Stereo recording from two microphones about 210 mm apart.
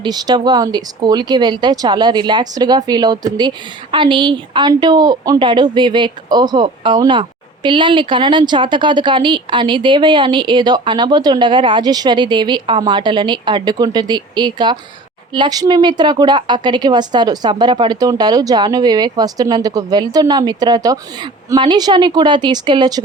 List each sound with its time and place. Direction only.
0.0 s speech: 20° right (ahead or behind)